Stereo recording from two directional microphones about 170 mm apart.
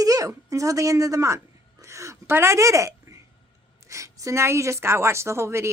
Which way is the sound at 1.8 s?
15° right (ahead or behind).